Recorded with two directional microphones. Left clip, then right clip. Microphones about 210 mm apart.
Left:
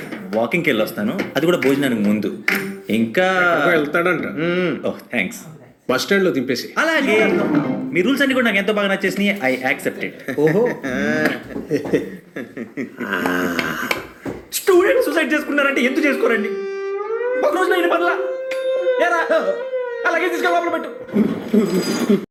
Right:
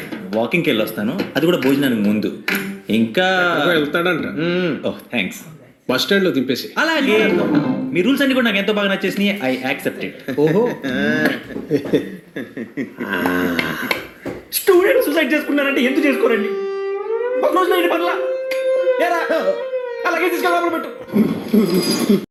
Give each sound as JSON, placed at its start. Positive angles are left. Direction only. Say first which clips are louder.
{"t": 0.3, "sound": "a woman's voice", "louder": "even", "side_deg": -25}